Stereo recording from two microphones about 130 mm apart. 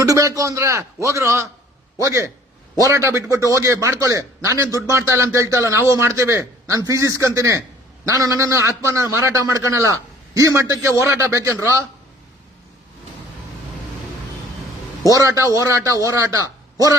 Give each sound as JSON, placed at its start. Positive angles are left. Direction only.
{"t": 0.0, "sound": "a man's voice", "side_deg": -25}
{"t": 15.1, "sound": "a man's voice", "side_deg": -25}